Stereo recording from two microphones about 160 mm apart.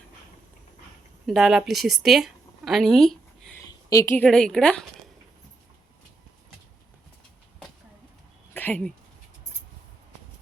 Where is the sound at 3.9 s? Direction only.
15° left (ahead or behind).